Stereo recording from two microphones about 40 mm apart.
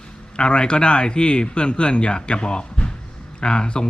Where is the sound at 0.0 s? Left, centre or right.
Left.